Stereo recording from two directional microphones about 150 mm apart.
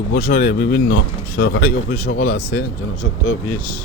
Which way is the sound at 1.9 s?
55° left (ahead or behind).